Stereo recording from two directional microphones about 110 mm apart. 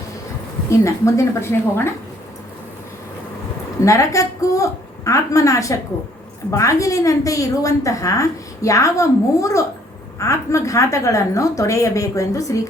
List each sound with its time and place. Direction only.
0.7 s a woman's voice: 25° left (ahead or behind)
3.8 s a woman's voice: 30° left (ahead or behind)